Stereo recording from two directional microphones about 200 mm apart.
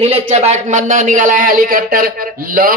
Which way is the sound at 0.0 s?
30° right (ahead or behind).